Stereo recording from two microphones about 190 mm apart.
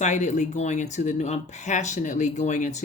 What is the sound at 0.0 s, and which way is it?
Speech, 40° left (ahead or behind).